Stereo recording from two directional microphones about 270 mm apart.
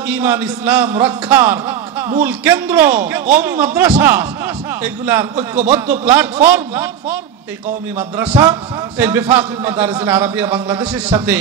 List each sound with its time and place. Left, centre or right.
0.1 s a man's voice: centre
8.2 s a man's voice: centre